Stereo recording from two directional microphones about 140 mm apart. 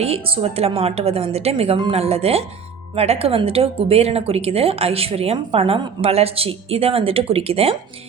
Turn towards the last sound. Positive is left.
turn(degrees=-45)  # may be behind; listen again after turning